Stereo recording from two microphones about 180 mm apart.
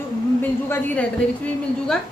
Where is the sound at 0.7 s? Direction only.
10° left (ahead or behind).